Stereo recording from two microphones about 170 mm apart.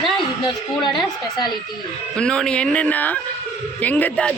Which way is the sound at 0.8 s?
25° left (ahead or behind).